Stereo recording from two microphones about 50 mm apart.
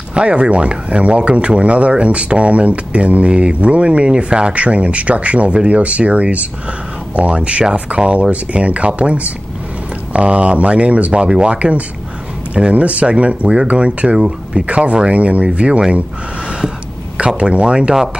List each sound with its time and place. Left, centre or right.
0.1 s speech: centre
17.4 s speech: centre